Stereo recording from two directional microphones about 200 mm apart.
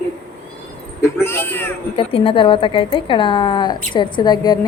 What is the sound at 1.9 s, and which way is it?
A woman's voice, 25° left (ahead or behind).